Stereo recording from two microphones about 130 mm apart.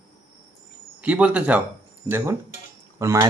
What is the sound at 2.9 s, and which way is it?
Speech, 25° right (ahead or behind).